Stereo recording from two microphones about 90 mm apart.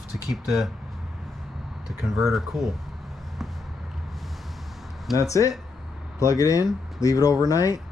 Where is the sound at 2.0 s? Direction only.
Centre (ahead or behind).